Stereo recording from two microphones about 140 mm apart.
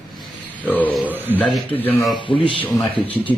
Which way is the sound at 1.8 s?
15° left (ahead or behind).